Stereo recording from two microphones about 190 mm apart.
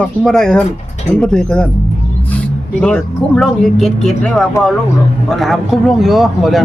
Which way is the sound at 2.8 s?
5° left (ahead or behind).